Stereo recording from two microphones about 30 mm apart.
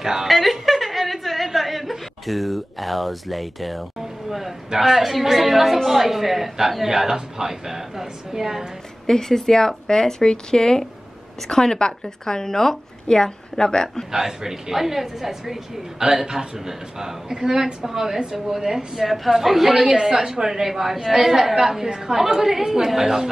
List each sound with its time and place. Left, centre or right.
0.0 s a woman's voice: centre
0.3 s chuckle: centre
4.3 s a man's voice: centre
9.0 s a woman's voice: centre
14.1 s a woman's voice: centre
16.0 s a woman's voice: right
18.9 s a woman's voice: centre